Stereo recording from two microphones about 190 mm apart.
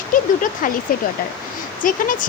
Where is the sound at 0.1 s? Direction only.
45° left (ahead or behind).